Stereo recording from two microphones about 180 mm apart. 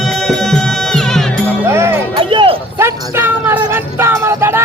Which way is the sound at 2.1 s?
30° right (ahead or behind).